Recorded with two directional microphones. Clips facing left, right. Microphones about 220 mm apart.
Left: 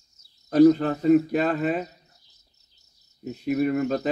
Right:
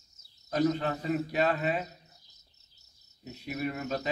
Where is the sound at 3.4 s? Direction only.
45° left (ahead or behind).